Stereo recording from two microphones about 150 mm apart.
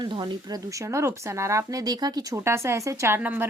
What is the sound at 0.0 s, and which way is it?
Speech, 30° right (ahead or behind).